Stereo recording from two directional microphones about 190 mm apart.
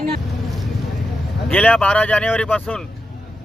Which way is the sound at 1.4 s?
10° left (ahead or behind).